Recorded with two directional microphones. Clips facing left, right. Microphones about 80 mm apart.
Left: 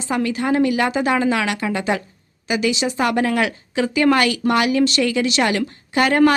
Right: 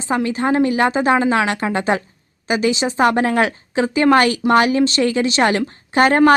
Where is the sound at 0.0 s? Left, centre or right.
Right.